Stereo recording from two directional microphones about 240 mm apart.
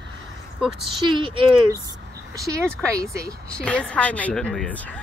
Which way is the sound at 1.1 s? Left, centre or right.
Centre.